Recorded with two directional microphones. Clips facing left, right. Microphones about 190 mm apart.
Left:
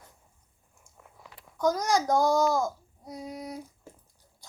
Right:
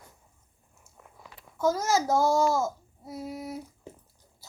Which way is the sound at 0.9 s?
5° right (ahead or behind).